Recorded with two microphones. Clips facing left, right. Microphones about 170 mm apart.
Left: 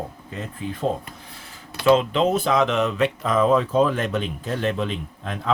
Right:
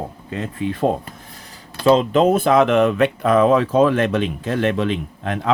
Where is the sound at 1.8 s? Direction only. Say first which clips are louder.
Right 3 dB; 35° right (ahead or behind).